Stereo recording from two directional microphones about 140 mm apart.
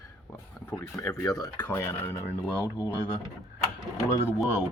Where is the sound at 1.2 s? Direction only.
25° left (ahead or behind).